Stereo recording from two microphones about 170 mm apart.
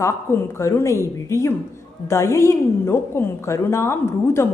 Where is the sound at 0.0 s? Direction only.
15° left (ahead or behind).